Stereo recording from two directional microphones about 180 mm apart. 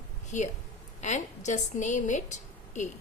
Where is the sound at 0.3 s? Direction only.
40° left (ahead or behind).